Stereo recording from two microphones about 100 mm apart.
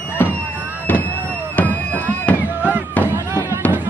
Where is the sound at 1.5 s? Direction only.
15° left (ahead or behind).